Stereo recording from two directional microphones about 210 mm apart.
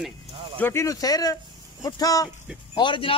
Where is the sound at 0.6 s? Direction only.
10° left (ahead or behind).